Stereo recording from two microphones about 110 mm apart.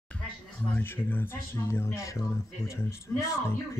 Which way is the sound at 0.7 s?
20° left (ahead or behind).